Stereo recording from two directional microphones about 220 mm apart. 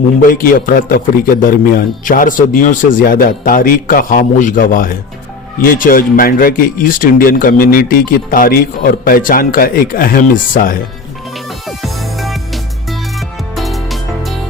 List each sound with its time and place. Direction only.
0.2 s speech: 40° left (ahead or behind)
11.8 s music: centre (ahead or behind)